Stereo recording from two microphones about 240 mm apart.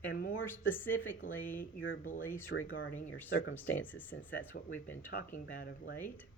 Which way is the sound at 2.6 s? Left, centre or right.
Left.